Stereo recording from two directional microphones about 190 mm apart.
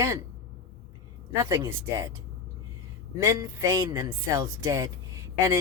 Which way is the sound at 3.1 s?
20° right (ahead or behind).